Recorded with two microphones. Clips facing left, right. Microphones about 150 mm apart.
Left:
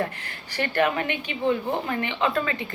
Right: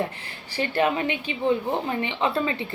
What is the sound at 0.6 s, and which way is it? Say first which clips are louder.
A woman's voice: right 1 dB; 20° right (ahead or behind).